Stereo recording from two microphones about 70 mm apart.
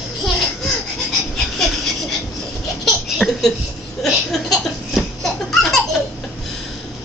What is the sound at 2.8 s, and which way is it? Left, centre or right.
Laughter, centre.